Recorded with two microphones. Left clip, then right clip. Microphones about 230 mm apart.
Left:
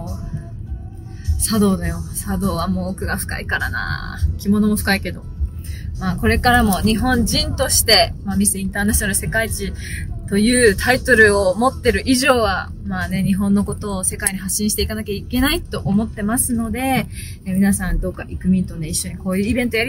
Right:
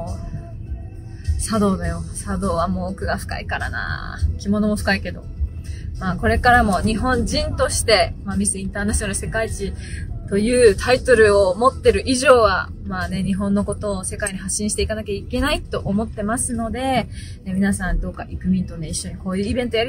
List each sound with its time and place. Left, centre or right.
1.4 s speech: centre